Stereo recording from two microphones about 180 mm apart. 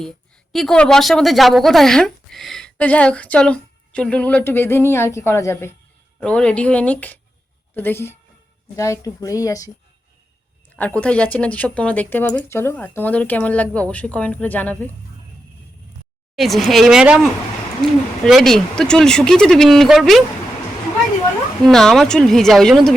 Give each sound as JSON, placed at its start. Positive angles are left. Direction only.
{"t": 0.5, "sound": "a woman's voice", "side_deg": 5}
{"t": 10.8, "sound": "speech", "side_deg": 5}
{"t": 16.3, "sound": "speech", "side_deg": 0}
{"t": 21.7, "sound": "speech", "side_deg": 0}